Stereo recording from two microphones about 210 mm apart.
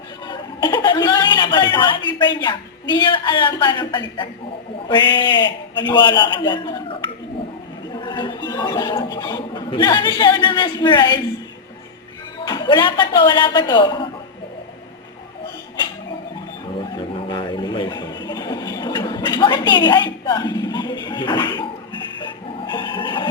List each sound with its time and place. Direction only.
0.3 s chuckle: 20° left (ahead or behind)
3.6 s speech: 20° left (ahead or behind)
7.9 s a sound: 20° left (ahead or behind)
8.4 s speech: 15° left (ahead or behind)
12.5 s speech: 20° left (ahead or behind)
17.2 s a sound: 25° left (ahead or behind)
22.2 s music: 20° left (ahead or behind)